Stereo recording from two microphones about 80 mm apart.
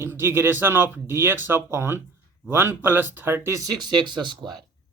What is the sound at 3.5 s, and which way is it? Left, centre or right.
Speech, right.